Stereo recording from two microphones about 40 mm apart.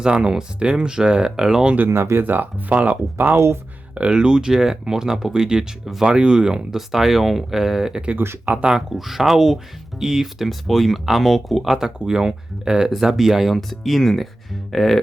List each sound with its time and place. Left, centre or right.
0.0 s speech: right
1.9 s speech: right
2.2 s speech: right
3.2 s speech: right
4.1 s speech: centre
6.7 s speech: centre
8.5 s speech: right
9.0 s speech: centre
11.9 s speech: centre
13.6 s speech: centre